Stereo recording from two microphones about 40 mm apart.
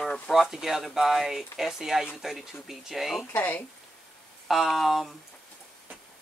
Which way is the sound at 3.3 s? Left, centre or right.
Left.